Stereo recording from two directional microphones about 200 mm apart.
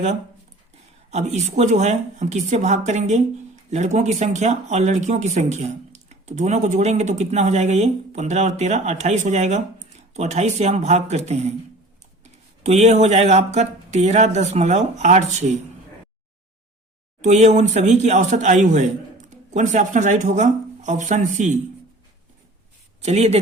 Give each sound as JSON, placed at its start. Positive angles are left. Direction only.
{"t": 1.4, "sound": "speech", "side_deg": -35}
{"t": 17.2, "sound": "speech", "side_deg": -35}
{"t": 23.0, "sound": "speech", "side_deg": -30}